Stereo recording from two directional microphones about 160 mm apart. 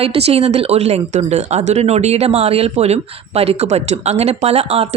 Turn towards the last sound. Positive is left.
turn(degrees=-40)  # may be behind; listen again after turning